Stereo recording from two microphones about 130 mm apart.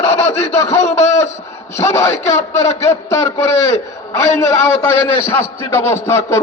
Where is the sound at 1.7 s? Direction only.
20° left (ahead or behind).